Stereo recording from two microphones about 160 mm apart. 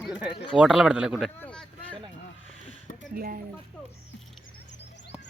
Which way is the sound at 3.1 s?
65° right (ahead or behind).